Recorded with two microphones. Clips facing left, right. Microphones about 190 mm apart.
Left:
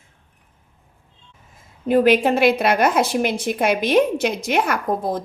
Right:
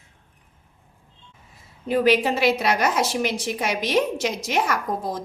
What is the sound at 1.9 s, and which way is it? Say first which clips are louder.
A woman's voice: left 4 dB; 50° left (ahead or behind).